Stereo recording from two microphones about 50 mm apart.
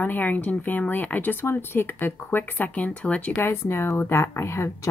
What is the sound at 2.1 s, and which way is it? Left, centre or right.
A woman's voice, left.